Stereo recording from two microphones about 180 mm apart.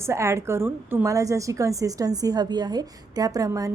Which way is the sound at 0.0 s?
15° right (ahead or behind).